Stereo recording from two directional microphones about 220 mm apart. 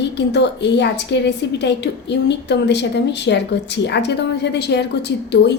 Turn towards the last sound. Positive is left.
turn(degrees=50)  # may be behind; listen again after turning